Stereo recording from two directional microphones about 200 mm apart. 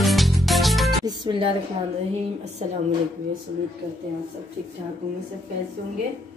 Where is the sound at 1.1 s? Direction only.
25° right (ahead or behind).